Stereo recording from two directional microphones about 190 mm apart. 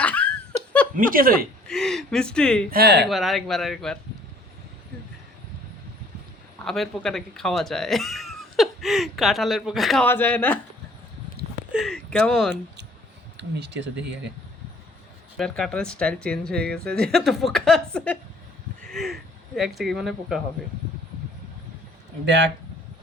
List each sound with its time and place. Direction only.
0.0 s laughter: 5° left (ahead or behind)
0.9 s speech: 45° right (ahead or behind)
1.6 s speech: centre (ahead or behind)
2.6 s speech: 55° right (ahead or behind)
3.1 s speech: centre (ahead or behind)
6.7 s speech: centre (ahead or behind)
11.7 s speech: centre (ahead or behind)
13.3 s speech: 65° right (ahead or behind)
15.4 s speech: centre (ahead or behind)